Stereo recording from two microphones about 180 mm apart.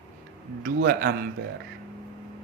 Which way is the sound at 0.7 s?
60° right (ahead or behind).